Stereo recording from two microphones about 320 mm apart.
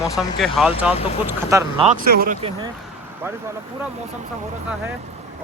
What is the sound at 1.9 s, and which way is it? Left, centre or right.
Speech, right.